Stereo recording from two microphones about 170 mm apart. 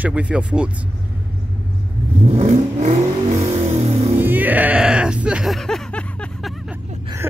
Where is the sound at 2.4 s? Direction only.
40° right (ahead or behind).